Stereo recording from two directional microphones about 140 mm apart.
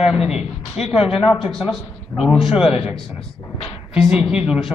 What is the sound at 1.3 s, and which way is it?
A man's voice, 5° right (ahead or behind).